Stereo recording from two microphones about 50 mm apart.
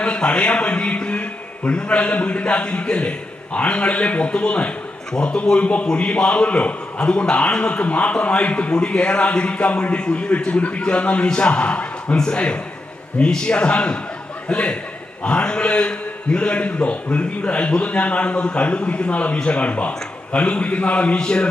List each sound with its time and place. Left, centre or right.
0.0 s a man's voice: left